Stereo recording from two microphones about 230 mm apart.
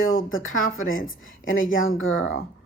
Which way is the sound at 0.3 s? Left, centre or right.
Left.